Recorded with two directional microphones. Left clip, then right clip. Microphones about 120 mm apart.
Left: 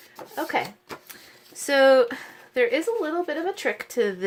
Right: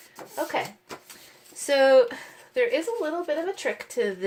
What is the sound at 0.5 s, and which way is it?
Speech, 50° left (ahead or behind).